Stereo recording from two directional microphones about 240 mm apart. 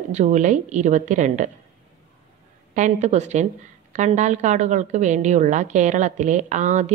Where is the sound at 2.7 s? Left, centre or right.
Right.